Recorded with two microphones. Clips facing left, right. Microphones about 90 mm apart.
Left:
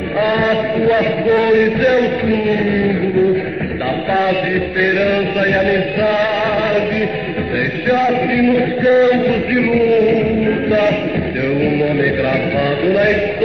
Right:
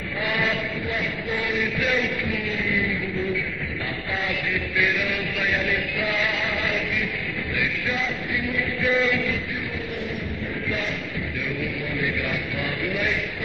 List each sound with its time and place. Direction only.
0.2 s a man's voice: 55° left (ahead or behind)
4.1 s a sound: 60° left (ahead or behind)
8.0 s a sound: 65° left (ahead or behind)
9.1 s music: 55° left (ahead or behind)
11.6 s mantra: 65° left (ahead or behind)
12.8 s a man's voice: 60° left (ahead or behind)